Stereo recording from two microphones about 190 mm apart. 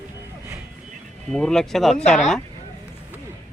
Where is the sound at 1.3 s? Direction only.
5° left (ahead or behind).